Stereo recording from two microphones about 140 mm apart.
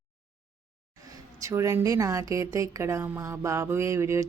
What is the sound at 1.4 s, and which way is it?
A woman's voice, 20° right (ahead or behind).